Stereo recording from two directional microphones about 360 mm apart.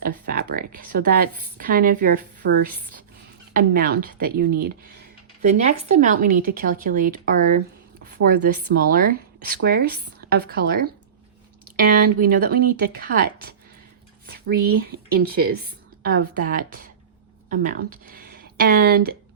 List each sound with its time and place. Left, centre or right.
0.0 s speech: right
8.7 s speech: right
11.9 s speech: right